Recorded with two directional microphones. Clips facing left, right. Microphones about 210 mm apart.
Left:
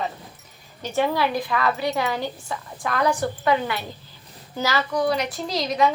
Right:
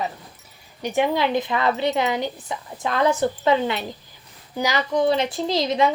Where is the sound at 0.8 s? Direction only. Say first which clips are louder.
Right 1 dB; 15° right (ahead or behind).